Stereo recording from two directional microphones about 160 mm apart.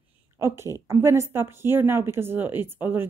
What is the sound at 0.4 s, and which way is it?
A woman's voice, 15° right (ahead or behind).